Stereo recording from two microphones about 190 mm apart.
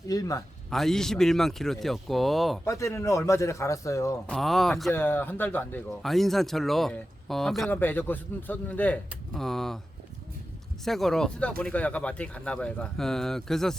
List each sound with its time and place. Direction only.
0.1 s a man's voice: 20° left (ahead or behind)
0.7 s speech: centre (ahead or behind)
2.6 s a man's voice: 15° left (ahead or behind)
4.3 s speech: centre (ahead or behind)
10.8 s speech: centre (ahead or behind)